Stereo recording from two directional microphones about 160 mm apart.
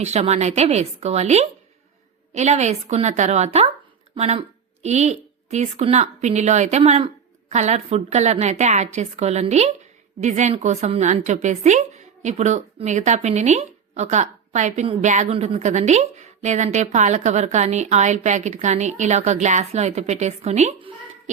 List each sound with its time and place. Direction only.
0.0 s a woman's voice: 45° right (ahead or behind)